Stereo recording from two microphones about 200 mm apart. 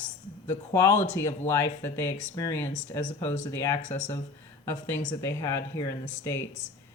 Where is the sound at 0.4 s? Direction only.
15° left (ahead or behind).